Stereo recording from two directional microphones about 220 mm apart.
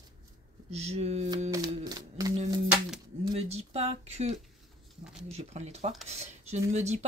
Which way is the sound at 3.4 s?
25° right (ahead or behind).